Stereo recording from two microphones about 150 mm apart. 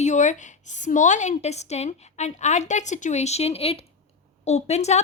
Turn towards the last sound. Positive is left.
turn(degrees=45)  # may be behind; listen again after turning